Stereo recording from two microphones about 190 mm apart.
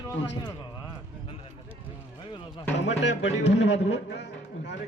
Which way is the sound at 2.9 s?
70° left (ahead or behind).